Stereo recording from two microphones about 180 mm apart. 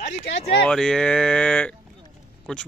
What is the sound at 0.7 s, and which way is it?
Speech, 5° left (ahead or behind).